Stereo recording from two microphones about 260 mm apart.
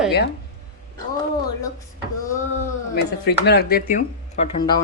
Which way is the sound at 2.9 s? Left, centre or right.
Left.